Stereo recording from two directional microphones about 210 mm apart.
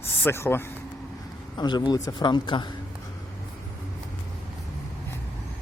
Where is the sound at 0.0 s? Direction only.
10° left (ahead or behind).